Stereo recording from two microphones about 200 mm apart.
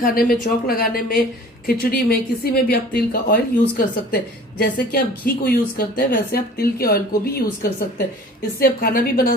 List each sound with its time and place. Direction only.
0.0 s speech: 45° left (ahead or behind)